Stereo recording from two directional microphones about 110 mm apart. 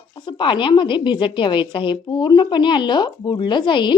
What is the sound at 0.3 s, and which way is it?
A woman's voice, 45° left (ahead or behind).